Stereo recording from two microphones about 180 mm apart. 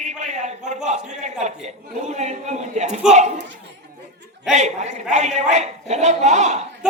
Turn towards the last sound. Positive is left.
turn(degrees=-40)  # may be behind; listen again after turning